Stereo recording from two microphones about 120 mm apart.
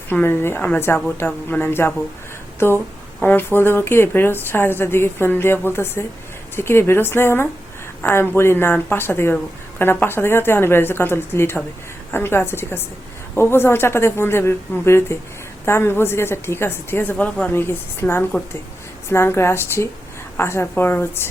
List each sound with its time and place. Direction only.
0.1 s a woman's voice: 20° left (ahead or behind)